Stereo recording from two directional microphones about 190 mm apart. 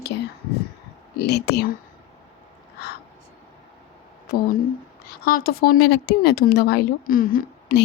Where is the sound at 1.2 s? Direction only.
60° left (ahead or behind).